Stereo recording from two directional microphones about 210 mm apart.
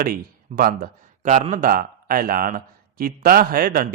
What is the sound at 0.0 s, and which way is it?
A man's voice, 45° right (ahead or behind).